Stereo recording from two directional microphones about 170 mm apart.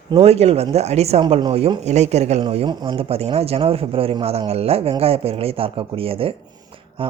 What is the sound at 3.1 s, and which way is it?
Speech, 35° right (ahead or behind).